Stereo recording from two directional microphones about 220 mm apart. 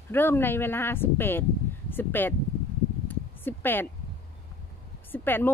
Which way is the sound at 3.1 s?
10° left (ahead or behind).